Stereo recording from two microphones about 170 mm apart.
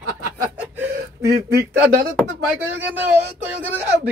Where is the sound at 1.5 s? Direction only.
65° right (ahead or behind).